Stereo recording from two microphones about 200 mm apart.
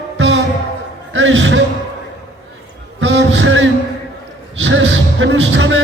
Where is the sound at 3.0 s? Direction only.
70° right (ahead or behind).